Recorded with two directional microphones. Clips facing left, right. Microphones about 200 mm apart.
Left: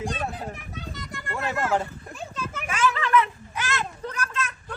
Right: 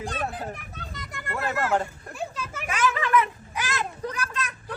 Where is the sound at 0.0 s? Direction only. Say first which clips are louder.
Left 1 dB; centre (ahead or behind).